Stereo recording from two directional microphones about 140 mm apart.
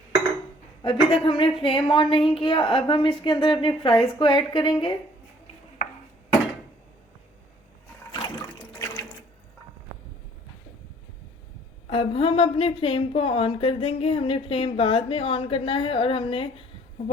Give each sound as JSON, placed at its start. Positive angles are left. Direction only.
{"t": 0.8, "sound": "a woman's voice", "side_deg": 35}
{"t": 5.8, "sound": "a sound", "side_deg": 65}
{"t": 11.9, "sound": "a woman's voice", "side_deg": 40}